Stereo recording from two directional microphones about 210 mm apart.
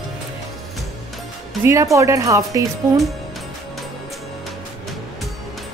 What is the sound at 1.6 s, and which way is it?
Speech, 15° right (ahead or behind).